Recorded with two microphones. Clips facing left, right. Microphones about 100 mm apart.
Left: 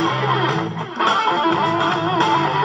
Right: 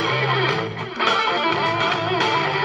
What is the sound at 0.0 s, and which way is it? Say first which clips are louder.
Music: left 3 dB; 30° left (ahead or behind).